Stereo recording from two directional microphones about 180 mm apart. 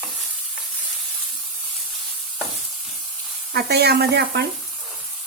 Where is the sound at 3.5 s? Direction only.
65° right (ahead or behind).